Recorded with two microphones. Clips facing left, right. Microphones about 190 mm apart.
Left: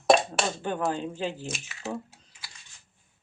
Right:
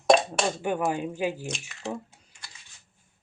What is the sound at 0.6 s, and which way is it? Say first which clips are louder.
Speech: right 2 dB; 10° right (ahead or behind).